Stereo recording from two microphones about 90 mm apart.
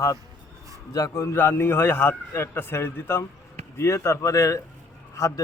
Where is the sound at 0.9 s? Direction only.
35° left (ahead or behind).